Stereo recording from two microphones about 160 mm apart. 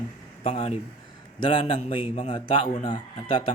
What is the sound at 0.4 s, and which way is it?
Speech, 40° left (ahead or behind).